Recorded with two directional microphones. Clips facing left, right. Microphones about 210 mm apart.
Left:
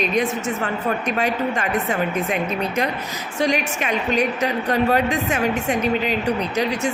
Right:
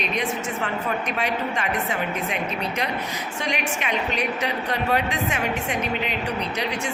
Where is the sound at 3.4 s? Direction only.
40° left (ahead or behind).